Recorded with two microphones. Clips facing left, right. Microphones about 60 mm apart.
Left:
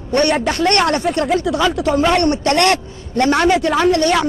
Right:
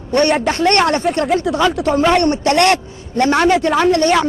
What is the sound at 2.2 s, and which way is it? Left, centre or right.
A woman's voice, right.